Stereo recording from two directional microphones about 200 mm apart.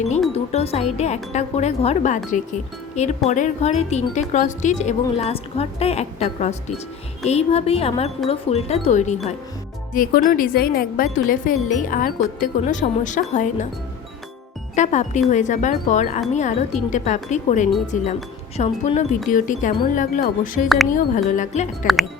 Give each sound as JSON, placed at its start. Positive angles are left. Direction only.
{"t": 0.3, "sound": "speech", "side_deg": 30}
{"t": 14.8, "sound": "speech", "side_deg": 35}